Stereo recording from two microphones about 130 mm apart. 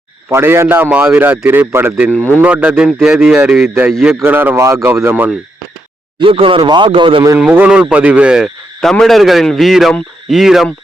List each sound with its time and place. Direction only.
0.3 s speech: 20° right (ahead or behind)
2.0 s speech: 15° left (ahead or behind)
2.4 s speech: 10° right (ahead or behind)
4.1 s speech: 15° right (ahead or behind)
6.1 s speech: 45° right (ahead or behind)
7.3 s speech: 10° right (ahead or behind)